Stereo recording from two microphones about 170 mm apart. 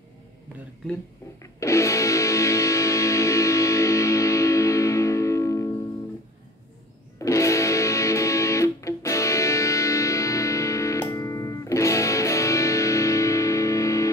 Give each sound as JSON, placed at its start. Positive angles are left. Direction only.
{"t": 1.4, "sound": "music", "side_deg": 15}
{"t": 7.2, "sound": "music", "side_deg": 20}